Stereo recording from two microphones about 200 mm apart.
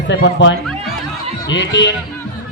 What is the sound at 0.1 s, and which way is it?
Speech, 60° left (ahead or behind).